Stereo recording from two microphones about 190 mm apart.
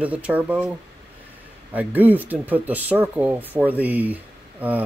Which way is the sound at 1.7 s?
10° right (ahead or behind).